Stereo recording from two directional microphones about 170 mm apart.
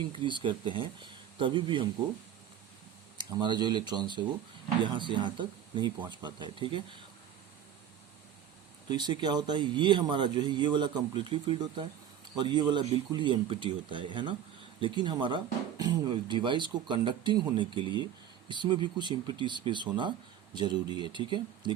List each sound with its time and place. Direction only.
0.2 s speech: 30° right (ahead or behind)
3.2 s speech: 25° right (ahead or behind)
8.9 s speech: 25° right (ahead or behind)